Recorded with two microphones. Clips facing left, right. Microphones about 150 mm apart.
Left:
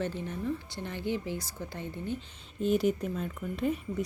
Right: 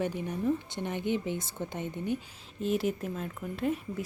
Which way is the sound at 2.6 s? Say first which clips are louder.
Left 3 dB; centre (ahead or behind).